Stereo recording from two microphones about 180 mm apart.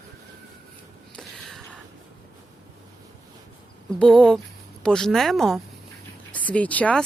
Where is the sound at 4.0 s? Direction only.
5° left (ahead or behind).